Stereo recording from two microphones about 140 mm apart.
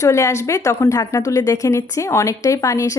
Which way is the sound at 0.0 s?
20° left (ahead or behind).